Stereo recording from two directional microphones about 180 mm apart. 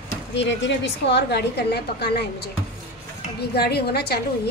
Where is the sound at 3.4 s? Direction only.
65° left (ahead or behind).